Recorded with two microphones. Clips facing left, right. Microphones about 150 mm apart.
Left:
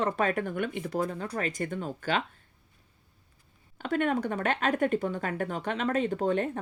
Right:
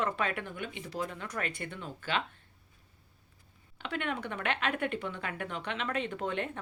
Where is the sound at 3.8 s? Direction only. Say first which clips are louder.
Left 8 dB; 45° left (ahead or behind).